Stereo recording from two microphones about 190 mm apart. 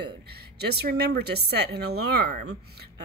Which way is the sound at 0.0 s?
55° right (ahead or behind).